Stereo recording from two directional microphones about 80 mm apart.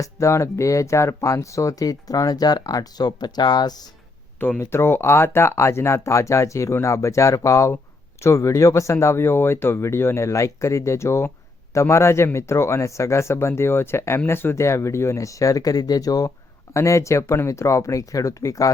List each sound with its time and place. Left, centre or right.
0.0 s speech: left
4.4 s speech: left
4.6 s speech: left
16.7 s speech: left